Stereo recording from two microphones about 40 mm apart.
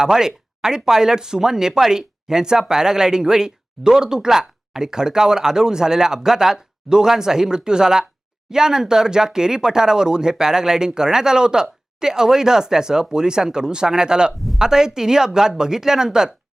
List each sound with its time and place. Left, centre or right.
0.0 s speech: centre